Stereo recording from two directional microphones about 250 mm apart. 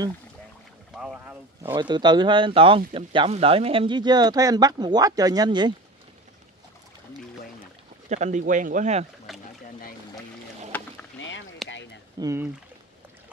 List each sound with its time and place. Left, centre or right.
0.9 s boat: centre
1.6 s speech: centre
8.1 s speech: right
9.3 s boat: centre
11.1 s a sound: left
12.2 s speech: centre